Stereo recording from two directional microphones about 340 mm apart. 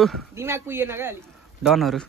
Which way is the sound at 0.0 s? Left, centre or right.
Centre.